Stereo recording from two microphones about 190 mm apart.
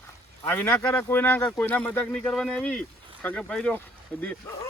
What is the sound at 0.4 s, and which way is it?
Speech, 10° left (ahead or behind).